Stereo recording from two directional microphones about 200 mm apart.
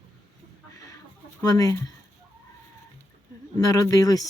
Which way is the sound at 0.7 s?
15° left (ahead or behind).